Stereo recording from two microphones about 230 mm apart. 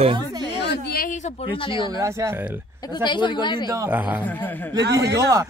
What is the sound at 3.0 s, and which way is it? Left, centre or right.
Speech, centre.